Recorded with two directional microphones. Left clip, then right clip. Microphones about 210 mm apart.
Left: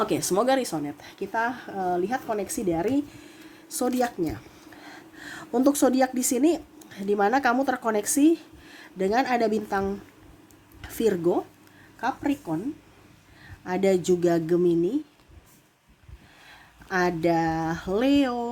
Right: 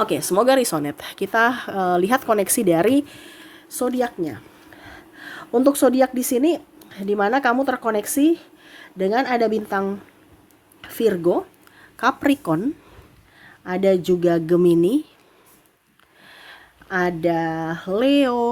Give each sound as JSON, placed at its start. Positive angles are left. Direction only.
{"t": 0.0, "sound": "a woman's voice", "side_deg": -15}
{"t": 3.7, "sound": "a woman's voice", "side_deg": -10}
{"t": 11.9, "sound": "a woman's voice", "side_deg": -35}
{"t": 13.7, "sound": "speech", "side_deg": -15}
{"t": 16.9, "sound": "speech", "side_deg": -10}